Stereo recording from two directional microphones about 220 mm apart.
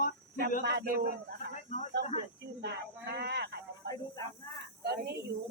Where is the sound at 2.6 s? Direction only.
50° right (ahead or behind).